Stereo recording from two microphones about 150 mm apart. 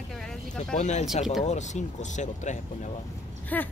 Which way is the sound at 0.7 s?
50° left (ahead or behind).